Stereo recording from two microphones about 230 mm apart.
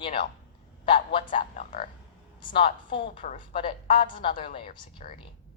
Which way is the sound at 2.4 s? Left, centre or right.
Left.